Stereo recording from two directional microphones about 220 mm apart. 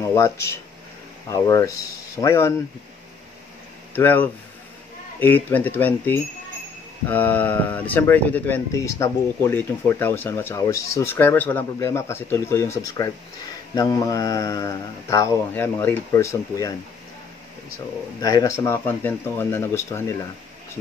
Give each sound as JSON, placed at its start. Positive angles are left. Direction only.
{"t": 0.1, "sound": "speech", "side_deg": 15}
{"t": 3.9, "sound": "speech", "side_deg": 10}
{"t": 18.2, "sound": "speech", "side_deg": 15}